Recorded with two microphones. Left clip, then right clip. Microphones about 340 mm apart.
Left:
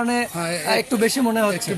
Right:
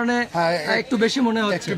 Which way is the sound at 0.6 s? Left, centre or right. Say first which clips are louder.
Left 1 dB; centre.